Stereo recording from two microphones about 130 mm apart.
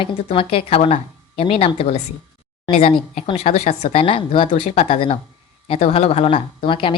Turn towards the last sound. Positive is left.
turn(degrees=40)  # may be behind; listen again after turning